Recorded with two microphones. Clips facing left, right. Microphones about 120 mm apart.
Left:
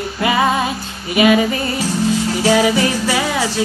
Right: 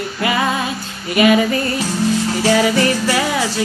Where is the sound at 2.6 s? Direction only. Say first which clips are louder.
Even; 10° left (ahead or behind).